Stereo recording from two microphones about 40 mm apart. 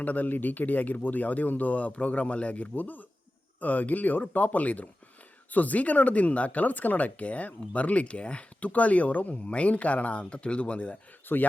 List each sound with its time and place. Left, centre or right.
0.0 s speech: left
11.3 s speech: left